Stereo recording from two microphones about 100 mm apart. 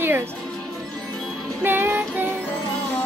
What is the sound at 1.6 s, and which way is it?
Speech, 20° right (ahead or behind).